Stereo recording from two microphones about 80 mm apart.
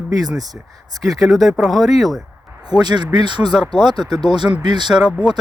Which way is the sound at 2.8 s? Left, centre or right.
Right.